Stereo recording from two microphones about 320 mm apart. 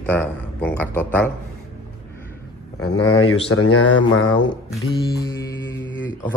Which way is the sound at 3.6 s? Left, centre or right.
Left.